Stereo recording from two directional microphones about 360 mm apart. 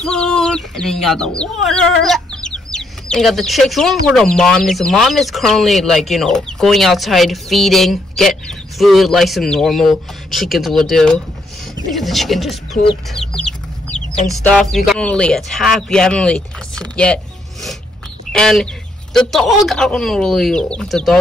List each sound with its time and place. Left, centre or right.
0.0 s speech: centre
12.7 s speech: centre
13.1 s chicken: centre
14.2 s speech: centre